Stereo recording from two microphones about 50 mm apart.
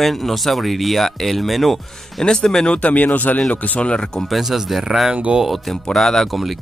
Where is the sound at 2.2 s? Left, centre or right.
Centre.